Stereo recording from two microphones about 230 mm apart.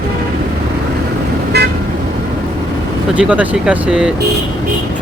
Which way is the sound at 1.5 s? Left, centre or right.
Right.